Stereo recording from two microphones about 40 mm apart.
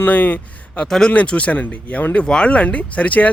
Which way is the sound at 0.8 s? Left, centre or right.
Centre.